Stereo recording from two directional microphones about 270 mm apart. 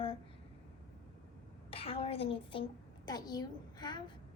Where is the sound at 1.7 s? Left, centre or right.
Left.